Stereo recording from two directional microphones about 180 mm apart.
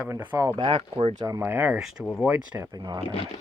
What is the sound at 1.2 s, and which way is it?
Speech, 20° right (ahead or behind).